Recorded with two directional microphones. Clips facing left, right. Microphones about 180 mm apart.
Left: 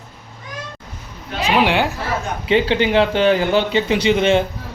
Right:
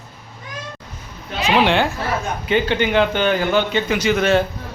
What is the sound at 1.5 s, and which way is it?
Speech, 10° left (ahead or behind).